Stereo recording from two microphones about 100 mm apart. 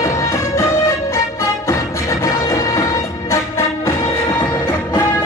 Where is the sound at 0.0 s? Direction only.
30° left (ahead or behind).